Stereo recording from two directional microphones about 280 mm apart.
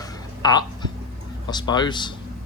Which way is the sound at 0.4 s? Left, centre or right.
Centre.